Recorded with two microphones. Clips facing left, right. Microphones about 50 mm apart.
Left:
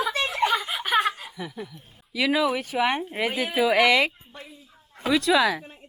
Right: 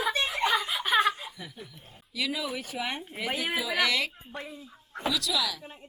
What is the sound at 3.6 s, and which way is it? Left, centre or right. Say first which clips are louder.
Speech: left 10 dB; centre.